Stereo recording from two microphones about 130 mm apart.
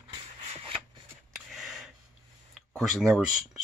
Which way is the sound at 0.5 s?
45° right (ahead or behind).